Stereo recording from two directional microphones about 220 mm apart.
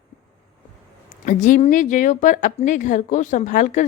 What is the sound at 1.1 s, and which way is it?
A woman's voice, 35° left (ahead or behind).